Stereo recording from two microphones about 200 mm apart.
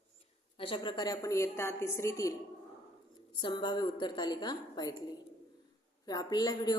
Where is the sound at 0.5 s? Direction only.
25° left (ahead or behind).